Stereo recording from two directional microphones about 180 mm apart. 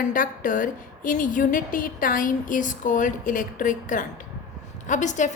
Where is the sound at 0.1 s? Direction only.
50° left (ahead or behind).